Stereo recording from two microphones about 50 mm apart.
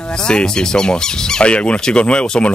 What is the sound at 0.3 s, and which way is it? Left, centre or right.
Speech, centre.